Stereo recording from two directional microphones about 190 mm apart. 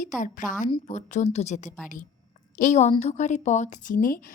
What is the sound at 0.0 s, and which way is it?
A woman's voice, 45° left (ahead or behind).